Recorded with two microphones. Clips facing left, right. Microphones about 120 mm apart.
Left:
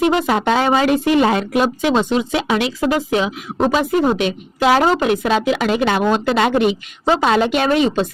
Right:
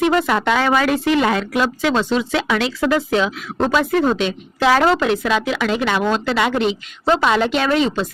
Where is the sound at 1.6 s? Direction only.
20° left (ahead or behind).